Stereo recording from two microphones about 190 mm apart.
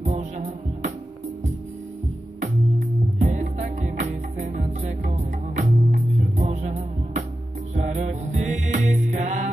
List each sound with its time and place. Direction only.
0.0 s music: 40° right (ahead or behind)
3.2 s music: 40° right (ahead or behind)